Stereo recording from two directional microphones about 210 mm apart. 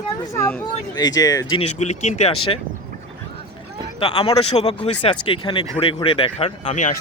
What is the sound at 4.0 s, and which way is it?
Speech, 25° left (ahead or behind).